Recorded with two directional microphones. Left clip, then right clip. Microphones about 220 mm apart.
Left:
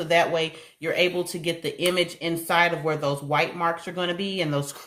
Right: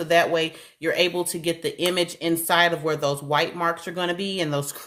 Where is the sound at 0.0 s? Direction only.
35° right (ahead or behind).